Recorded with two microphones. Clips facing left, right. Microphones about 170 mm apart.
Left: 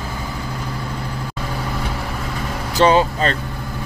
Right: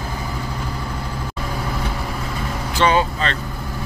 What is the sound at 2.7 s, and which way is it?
Vehicle, 40° left (ahead or behind).